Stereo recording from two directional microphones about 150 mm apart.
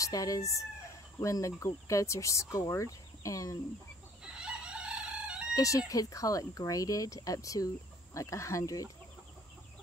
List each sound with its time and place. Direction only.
0.0 s speech: 20° left (ahead or behind)
4.2 s chicken: 5° right (ahead or behind)
5.5 s speech: 20° left (ahead or behind)